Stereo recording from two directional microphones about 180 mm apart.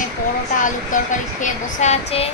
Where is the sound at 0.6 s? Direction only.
45° left (ahead or behind).